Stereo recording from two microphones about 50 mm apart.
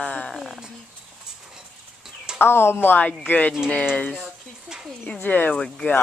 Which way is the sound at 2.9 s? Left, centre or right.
Left.